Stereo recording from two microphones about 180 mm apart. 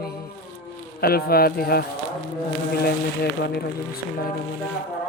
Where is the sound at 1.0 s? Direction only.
55° left (ahead or behind).